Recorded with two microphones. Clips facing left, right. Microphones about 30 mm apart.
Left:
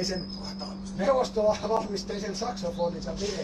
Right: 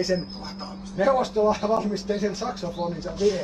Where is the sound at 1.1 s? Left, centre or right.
Centre.